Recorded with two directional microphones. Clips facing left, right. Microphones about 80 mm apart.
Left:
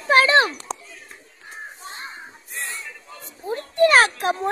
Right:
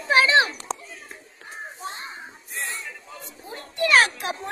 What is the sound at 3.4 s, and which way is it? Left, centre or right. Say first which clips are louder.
A child's voice: left 9 dB; left.